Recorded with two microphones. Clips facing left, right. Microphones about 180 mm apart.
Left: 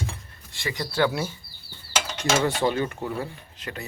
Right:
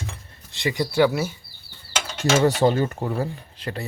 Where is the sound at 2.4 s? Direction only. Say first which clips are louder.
Right 5 dB; 40° right (ahead or behind).